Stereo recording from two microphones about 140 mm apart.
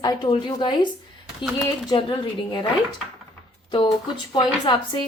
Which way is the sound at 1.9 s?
35° left (ahead or behind).